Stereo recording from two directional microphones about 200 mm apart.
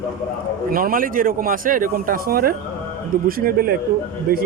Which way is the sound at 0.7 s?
45° right (ahead or behind).